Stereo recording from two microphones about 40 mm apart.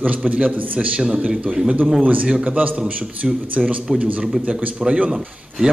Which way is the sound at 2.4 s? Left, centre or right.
Right.